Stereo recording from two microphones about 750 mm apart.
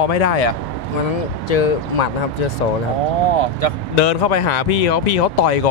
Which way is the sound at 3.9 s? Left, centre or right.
Left.